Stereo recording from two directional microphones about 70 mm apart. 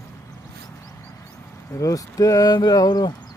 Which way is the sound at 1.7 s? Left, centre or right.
Left.